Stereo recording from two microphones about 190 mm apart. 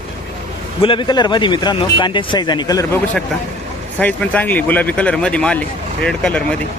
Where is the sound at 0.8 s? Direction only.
25° left (ahead or behind).